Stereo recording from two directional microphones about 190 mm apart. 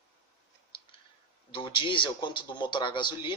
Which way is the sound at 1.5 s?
25° left (ahead or behind).